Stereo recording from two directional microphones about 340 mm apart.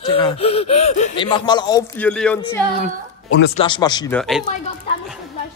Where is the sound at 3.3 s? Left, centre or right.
Left.